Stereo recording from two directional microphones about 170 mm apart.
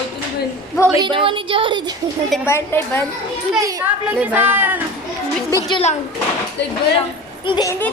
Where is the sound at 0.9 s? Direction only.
30° right (ahead or behind).